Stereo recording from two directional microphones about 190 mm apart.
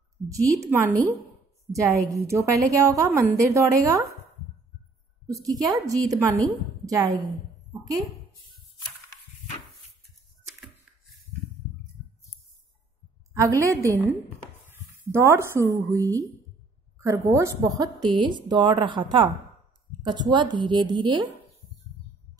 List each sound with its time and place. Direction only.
0.3 s a woman's voice: 15° right (ahead or behind)
5.3 s a woman's voice: 20° right (ahead or behind)
13.3 s a woman's voice: 15° right (ahead or behind)
15.0 s a woman's voice: 15° right (ahead or behind)